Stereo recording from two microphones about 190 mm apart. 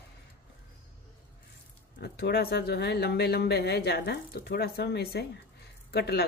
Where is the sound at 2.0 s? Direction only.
60° left (ahead or behind).